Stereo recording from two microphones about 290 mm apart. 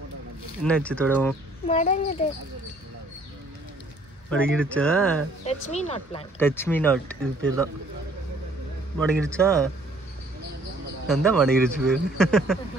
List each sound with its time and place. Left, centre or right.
0.7 s speech: centre
1.7 s speech: left
4.3 s speech: centre
5.4 s speech: left
6.4 s speech: centre
8.9 s speech: centre
11.1 s speech: centre